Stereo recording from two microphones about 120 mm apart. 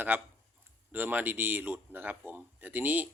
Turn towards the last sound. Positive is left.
turn(degrees=-15)  # may be behind; listen again after turning